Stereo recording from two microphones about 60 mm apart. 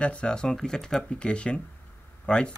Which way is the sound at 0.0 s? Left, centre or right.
Centre.